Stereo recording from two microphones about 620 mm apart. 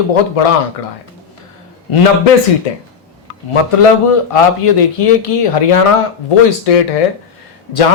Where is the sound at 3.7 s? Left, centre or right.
Left.